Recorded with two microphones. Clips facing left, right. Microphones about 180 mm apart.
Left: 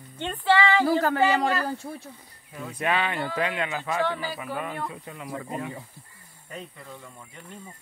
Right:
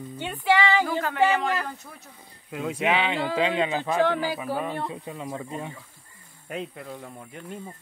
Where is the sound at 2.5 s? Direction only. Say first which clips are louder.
Right 7 dB; 90° right.